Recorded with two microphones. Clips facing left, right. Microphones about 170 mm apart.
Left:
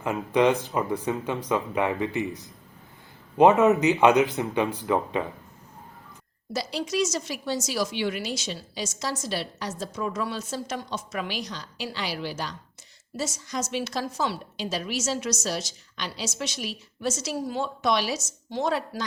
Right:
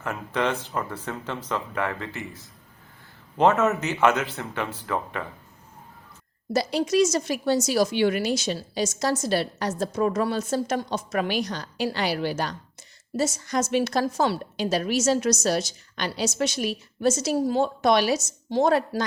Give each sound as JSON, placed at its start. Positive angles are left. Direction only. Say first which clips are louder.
{"t": 0.0, "sound": "speech", "louder": "left 5 dB", "side_deg": 15}
{"t": 6.5, "sound": "a woman's voice", "louder": "right 6 dB", "side_deg": -55}